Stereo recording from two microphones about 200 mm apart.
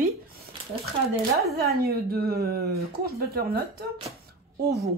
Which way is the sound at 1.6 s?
50° right (ahead or behind).